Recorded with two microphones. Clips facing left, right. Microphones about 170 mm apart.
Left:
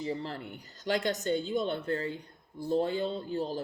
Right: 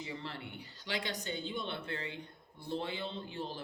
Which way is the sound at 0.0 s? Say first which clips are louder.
Left 8 dB; 40° left (ahead or behind).